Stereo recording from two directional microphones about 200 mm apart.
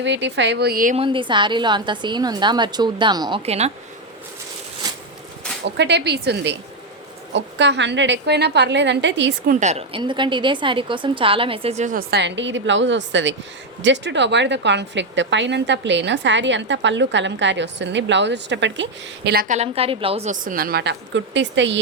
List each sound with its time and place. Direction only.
0.0 s a woman's voice: 60° right (ahead or behind); by 0.9 s 45° right (ahead or behind)
0.9 s a woman's voice: 25° right (ahead or behind)
4.8 s a sound: 20° right (ahead or behind)
5.6 s a woman's voice: 60° right (ahead or behind)
9.5 s a woman's voice: 35° right (ahead or behind)
19.5 s a woman's voice: 30° right (ahead or behind); by 21.8 s 65° right (ahead or behind)